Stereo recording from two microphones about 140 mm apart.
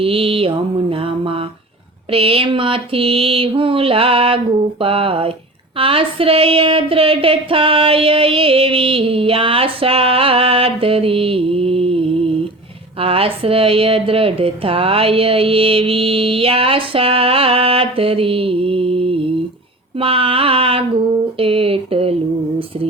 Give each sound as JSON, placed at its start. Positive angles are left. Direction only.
{"t": 0.0, "sound": "speech", "side_deg": -40}